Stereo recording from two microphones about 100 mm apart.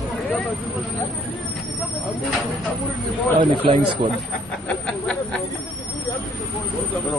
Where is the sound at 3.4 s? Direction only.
55° right (ahead or behind).